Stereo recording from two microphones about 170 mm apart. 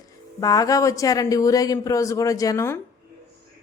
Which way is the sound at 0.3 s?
20° left (ahead or behind).